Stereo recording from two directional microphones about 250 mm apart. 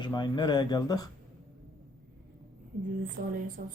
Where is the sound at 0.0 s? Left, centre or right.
Centre.